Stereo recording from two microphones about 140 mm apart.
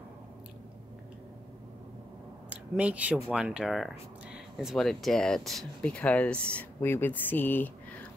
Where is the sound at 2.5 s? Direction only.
10° right (ahead or behind).